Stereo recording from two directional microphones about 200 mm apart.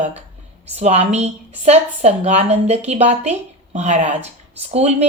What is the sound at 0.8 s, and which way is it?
A woman's voice, 30° right (ahead or behind).